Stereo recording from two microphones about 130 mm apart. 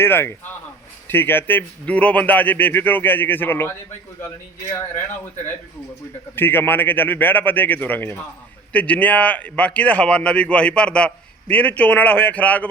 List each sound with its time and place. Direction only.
0.0 s a man's voice: 20° left (ahead or behind)
6.3 s a man's voice: 15° left (ahead or behind)